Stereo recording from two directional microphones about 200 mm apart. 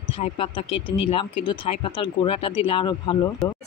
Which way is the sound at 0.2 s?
25° left (ahead or behind).